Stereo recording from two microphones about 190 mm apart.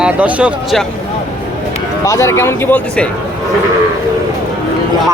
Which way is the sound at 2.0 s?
15° left (ahead or behind).